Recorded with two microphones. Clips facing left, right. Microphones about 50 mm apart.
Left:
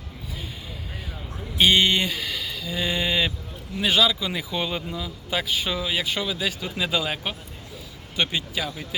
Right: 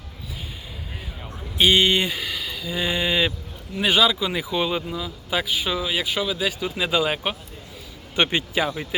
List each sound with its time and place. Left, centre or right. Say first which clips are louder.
1.5 s speech: right 1 dB; centre
8.1 s speech: right 4 dB; right
8.6 s speech: right 5 dB; right